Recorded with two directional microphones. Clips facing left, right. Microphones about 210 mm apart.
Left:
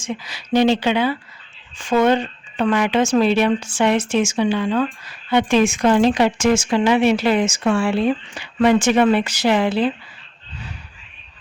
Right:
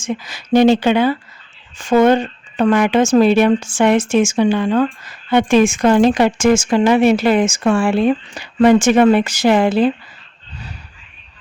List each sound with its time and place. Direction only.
0.0 s speech: 45° right (ahead or behind)